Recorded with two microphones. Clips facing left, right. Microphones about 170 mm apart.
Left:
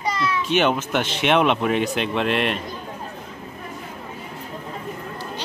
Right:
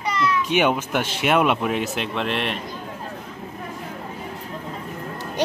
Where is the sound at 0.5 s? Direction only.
10° right (ahead or behind).